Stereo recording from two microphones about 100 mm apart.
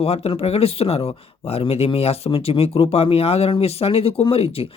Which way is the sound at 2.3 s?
65° left (ahead or behind).